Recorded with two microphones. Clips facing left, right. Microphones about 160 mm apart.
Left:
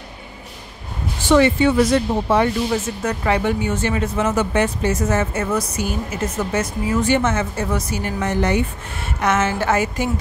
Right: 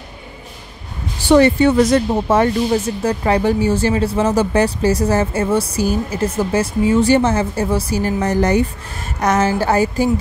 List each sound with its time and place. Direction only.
1.2 s speech: 40° right (ahead or behind)
3.0 s speech: 35° right (ahead or behind)